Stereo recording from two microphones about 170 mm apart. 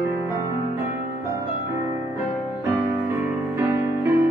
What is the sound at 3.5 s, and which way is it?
Music, 15° right (ahead or behind).